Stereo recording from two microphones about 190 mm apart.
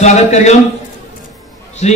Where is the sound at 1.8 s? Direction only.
35° left (ahead or behind).